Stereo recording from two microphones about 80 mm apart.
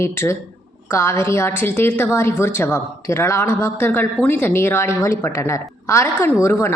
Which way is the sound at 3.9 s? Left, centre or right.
Left.